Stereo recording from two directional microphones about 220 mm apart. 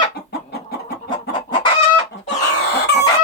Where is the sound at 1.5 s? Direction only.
20° left (ahead or behind).